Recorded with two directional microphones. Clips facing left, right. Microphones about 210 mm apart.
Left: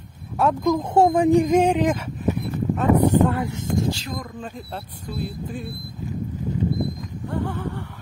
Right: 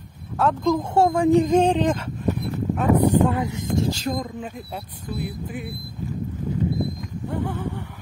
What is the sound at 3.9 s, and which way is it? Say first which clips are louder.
Speech: right 5 dB; 45° right (ahead or behind).